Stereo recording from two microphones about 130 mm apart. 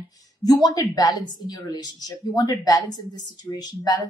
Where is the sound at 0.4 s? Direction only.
30° left (ahead or behind).